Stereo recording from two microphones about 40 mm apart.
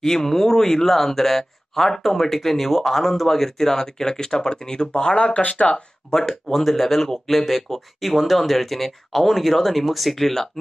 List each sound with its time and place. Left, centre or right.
0.0 s speech: centre
5.1 s speech: left
6.0 s speech: centre
6.6 s speech: centre